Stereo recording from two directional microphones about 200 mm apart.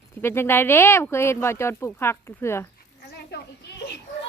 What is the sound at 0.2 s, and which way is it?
Speech, 10° left (ahead or behind).